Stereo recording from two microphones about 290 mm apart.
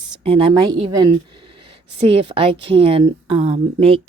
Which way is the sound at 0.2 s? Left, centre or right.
Centre.